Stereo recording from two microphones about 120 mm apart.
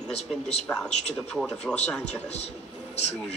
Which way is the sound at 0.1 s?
60° left (ahead or behind).